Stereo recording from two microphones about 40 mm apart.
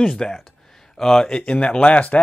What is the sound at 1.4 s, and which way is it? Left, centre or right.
Speech, left.